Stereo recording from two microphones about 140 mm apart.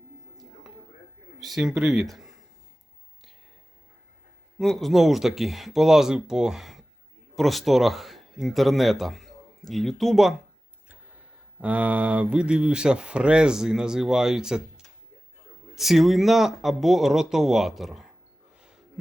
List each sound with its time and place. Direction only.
1.4 s speech: centre (ahead or behind)
4.5 s speech: centre (ahead or behind)
11.6 s speech: 10° right (ahead or behind)
15.7 s speech: centre (ahead or behind)
18.5 s a sound: 5° right (ahead or behind)